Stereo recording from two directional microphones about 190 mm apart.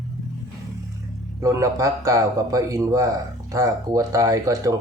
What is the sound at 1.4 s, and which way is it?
Speech, 15° right (ahead or behind).